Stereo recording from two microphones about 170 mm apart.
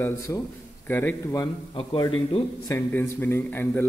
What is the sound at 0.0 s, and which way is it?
A man's voice, 20° left (ahead or behind).